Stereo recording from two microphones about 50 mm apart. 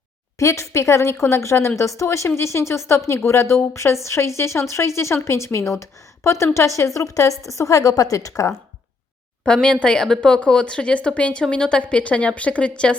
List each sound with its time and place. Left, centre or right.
0.3 s a woman's voice: left
9.5 s a woman's voice: centre